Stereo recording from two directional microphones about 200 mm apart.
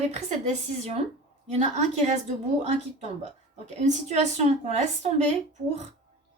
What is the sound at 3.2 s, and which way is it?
A woman's voice, 35° right (ahead or behind).